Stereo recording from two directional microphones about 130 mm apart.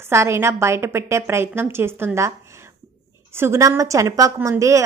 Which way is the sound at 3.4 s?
20° right (ahead or behind).